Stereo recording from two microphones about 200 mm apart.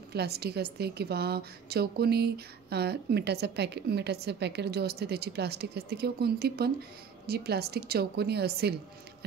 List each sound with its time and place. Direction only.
0.1 s a woman's voice: 55° right (ahead or behind)